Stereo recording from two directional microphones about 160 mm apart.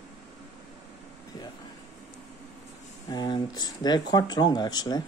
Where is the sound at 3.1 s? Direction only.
25° left (ahead or behind).